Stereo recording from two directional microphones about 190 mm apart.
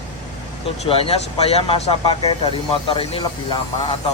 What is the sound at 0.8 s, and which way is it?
Speech, 30° left (ahead or behind).